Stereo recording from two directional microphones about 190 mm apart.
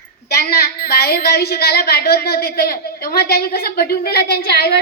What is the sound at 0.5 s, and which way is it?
A woman's voice, 55° left (ahead or behind).